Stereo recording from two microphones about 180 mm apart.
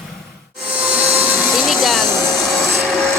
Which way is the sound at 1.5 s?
Centre (ahead or behind).